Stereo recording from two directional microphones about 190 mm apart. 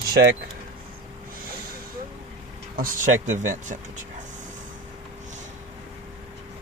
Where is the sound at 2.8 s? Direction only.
45° right (ahead or behind).